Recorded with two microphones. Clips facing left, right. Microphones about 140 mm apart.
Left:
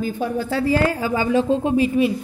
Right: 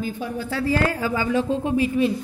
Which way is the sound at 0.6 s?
20° left (ahead or behind).